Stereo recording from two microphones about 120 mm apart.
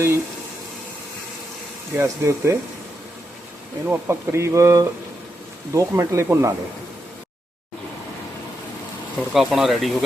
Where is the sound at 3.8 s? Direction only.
20° right (ahead or behind).